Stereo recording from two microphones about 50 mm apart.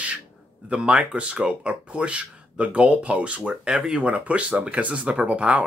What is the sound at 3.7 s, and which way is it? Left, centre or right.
Speech, centre.